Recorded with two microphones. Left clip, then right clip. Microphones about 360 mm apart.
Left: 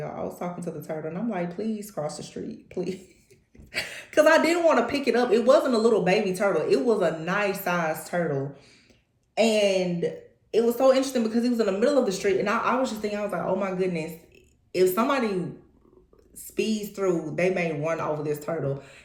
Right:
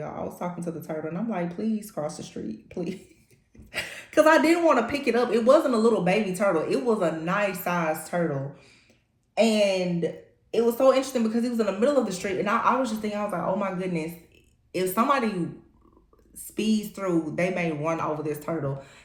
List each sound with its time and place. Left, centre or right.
0.0 s a woman's voice: centre
16.6 s a woman's voice: centre